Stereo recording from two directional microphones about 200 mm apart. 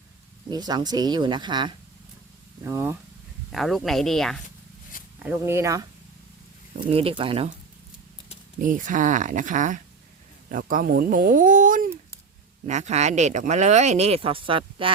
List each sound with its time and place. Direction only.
0.5 s speech: 20° right (ahead or behind)
2.6 s speech: 10° right (ahead or behind)
3.5 s speech: centre (ahead or behind)
5.2 s speech: 10° right (ahead or behind)
6.8 s speech: 30° right (ahead or behind)
8.5 s speech: 40° right (ahead or behind); by 14.9 s 25° right (ahead or behind)